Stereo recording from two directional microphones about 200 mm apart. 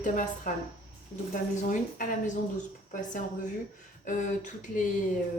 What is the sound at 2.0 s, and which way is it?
Speech, 40° left (ahead or behind).